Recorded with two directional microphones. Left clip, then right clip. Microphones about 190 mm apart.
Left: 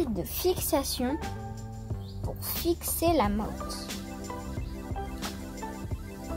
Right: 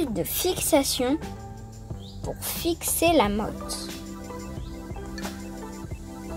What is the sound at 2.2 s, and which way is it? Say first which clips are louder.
Speech: right 2 dB; 40° right (ahead or behind).